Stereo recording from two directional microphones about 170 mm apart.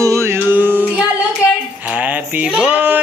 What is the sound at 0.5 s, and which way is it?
Female singing, 10° right (ahead or behind).